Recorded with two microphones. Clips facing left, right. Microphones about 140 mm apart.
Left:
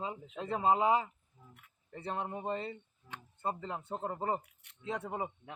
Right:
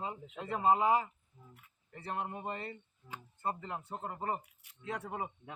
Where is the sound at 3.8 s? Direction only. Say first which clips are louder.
Left 4 dB; 20° left (ahead or behind).